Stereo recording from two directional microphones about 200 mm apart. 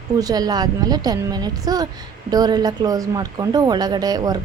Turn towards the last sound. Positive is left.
turn(degrees=-20)  # may be behind; listen again after turning